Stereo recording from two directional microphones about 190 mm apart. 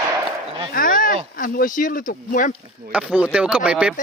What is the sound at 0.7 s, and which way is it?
Speech, 45° left (ahead or behind).